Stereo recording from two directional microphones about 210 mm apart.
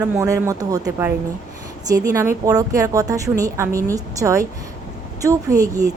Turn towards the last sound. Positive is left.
turn(degrees=-15)  # may be behind; listen again after turning